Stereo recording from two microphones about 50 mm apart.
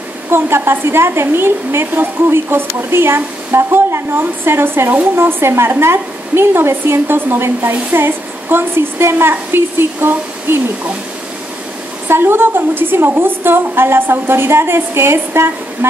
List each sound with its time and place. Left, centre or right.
0.3 s a woman's voice: right
12.1 s a woman's voice: right